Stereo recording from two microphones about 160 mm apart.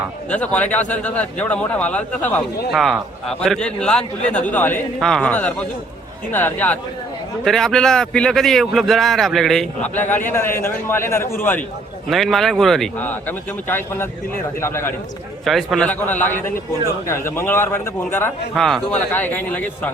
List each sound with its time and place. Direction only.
0.3 s a man's voice: 10° left (ahead or behind)
12.0 s a man's voice: centre (ahead or behind); by 14.9 s 15° left (ahead or behind)
15.4 s a man's voice: centre (ahead or behind)
18.5 s a man's voice: 5° left (ahead or behind)